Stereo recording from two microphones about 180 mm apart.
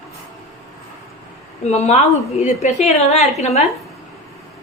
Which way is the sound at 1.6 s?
40° left (ahead or behind).